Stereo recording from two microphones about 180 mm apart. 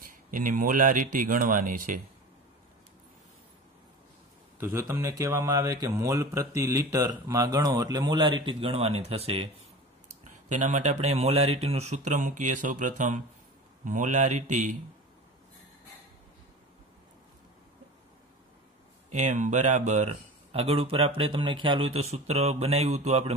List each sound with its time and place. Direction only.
0.1 s speech: 50° right (ahead or behind)
4.6 s speech: 15° right (ahead or behind); by 9.5 s 35° right (ahead or behind)
10.5 s speech: 45° right (ahead or behind)
19.0 s speech: 40° right (ahead or behind)